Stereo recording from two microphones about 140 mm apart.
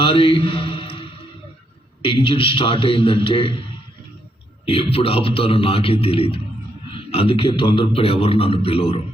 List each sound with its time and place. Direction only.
0.0 s mantra: 40° left (ahead or behind)
2.0 s a man's voice: 40° left (ahead or behind)
4.6 s a man's voice: 40° left (ahead or behind)